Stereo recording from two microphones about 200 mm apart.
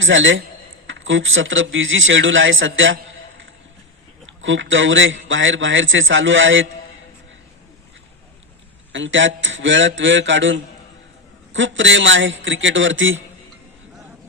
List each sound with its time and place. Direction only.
0.0 s a man's voice: 70° right (ahead or behind)
4.4 s a man's voice: 70° right (ahead or behind)
8.9 s a man's voice: 70° right (ahead or behind)